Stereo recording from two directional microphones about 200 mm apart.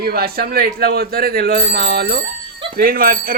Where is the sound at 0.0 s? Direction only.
50° right (ahead or behind).